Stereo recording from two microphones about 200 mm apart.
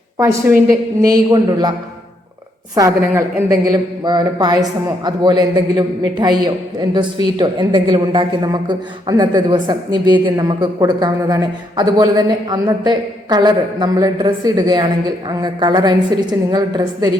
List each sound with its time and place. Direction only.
0.2 s a woman's voice: 10° right (ahead or behind)
2.7 s a man's voice: 15° right (ahead or behind)